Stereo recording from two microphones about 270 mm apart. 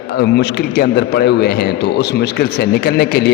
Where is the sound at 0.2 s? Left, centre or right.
Left.